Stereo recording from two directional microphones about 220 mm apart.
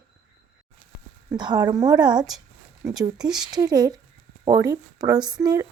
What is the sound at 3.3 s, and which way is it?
Speech, 5° right (ahead or behind).